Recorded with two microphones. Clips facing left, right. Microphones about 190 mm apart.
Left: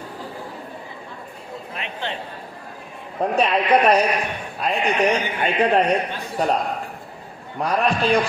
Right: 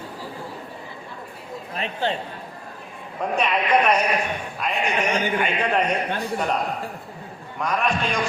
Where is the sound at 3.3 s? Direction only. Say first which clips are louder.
Left 2 dB; 35° left (ahead or behind).